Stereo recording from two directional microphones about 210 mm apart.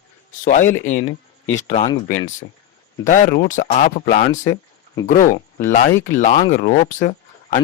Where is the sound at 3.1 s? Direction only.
40° left (ahead or behind).